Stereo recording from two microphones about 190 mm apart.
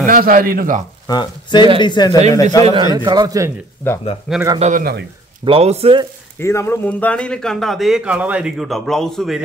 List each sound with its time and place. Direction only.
0.0 s a man's voice: 45° right (ahead or behind)
1.0 s speech: 25° left (ahead or behind)
2.9 s a man's voice: 20° right (ahead or behind)
4.6 s a man's voice: 40° right (ahead or behind)
6.4 s a man's voice: 15° left (ahead or behind)